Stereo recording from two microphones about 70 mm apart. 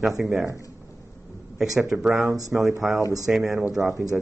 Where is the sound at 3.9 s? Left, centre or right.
Right.